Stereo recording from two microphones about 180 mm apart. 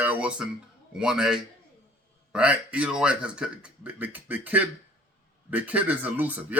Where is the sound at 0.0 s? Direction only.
10° right (ahead or behind).